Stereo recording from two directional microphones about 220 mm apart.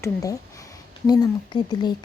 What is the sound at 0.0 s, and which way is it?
Speech, 15° left (ahead or behind).